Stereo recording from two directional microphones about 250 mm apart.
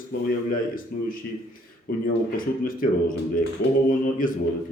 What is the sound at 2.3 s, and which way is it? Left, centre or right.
Speech, left.